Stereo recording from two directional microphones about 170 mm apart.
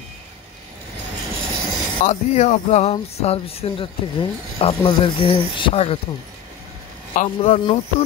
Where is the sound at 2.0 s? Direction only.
45° left (ahead or behind).